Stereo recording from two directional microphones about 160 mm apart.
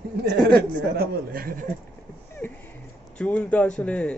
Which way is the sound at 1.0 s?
65° right (ahead or behind).